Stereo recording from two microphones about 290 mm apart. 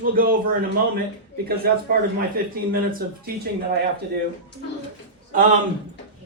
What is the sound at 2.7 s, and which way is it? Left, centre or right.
Speech, right.